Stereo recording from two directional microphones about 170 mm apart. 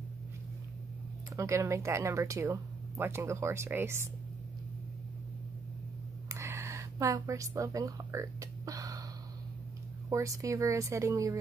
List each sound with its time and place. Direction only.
1.3 s speech: 15° right (ahead or behind)
6.2 s a sound: 15° right (ahead or behind)
10.0 s speech: 20° right (ahead or behind)